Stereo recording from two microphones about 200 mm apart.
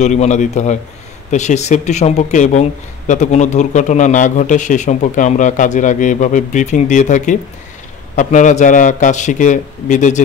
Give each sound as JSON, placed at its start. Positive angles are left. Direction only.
{"t": 0.0, "sound": "speech", "side_deg": 35}